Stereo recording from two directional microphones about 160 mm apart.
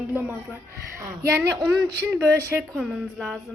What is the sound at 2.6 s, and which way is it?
Speech, centre (ahead or behind).